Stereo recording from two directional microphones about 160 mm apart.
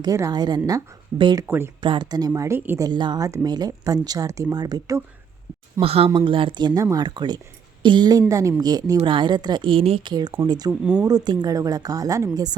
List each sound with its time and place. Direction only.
0.0 s speech: 20° right (ahead or behind)
1.5 s speech: 15° right (ahead or behind)
1.8 s speech: 30° right (ahead or behind)
5.8 s a woman's voice: 35° right (ahead or behind)
10.7 s speech: 5° right (ahead or behind)
11.0 s speech: 25° right (ahead or behind)